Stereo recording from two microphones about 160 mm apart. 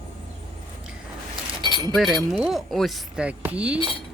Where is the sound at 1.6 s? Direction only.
30° right (ahead or behind).